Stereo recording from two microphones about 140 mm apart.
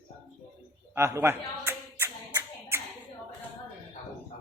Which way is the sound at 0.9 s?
20° right (ahead or behind).